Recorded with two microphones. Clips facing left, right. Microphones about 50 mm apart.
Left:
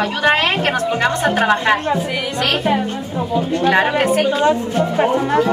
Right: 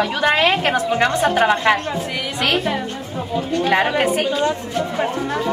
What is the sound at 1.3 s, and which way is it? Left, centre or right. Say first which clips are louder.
Speech: left 1 dB; centre.